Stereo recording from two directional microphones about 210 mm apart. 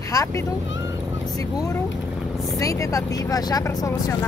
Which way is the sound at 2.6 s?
15° left (ahead or behind).